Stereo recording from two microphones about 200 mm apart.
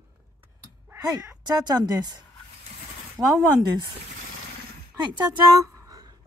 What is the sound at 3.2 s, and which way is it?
Speech, 15° right (ahead or behind).